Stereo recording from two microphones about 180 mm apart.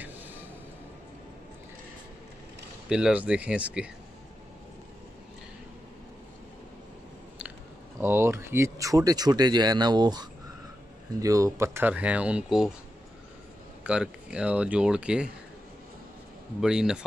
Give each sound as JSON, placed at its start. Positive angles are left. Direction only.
{"t": 0.0, "sound": "vehicle", "side_deg": -10}
{"t": 2.9, "sound": "speech", "side_deg": -5}
{"t": 8.0, "sound": "speech", "side_deg": -15}
{"t": 13.8, "sound": "speech", "side_deg": -5}
{"t": 16.6, "sound": "speech", "side_deg": -5}